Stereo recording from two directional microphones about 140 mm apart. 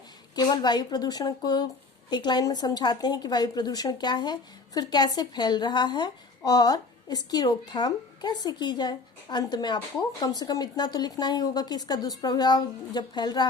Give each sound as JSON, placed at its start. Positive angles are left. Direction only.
{"t": 0.3, "sound": "a woman's voice", "side_deg": 30}